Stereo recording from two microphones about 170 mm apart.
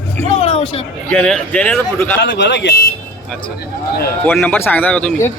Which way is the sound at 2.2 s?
90° left.